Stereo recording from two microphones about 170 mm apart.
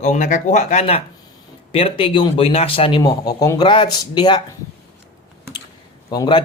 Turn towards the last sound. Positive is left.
turn(degrees=25)  # may be behind; listen again after turning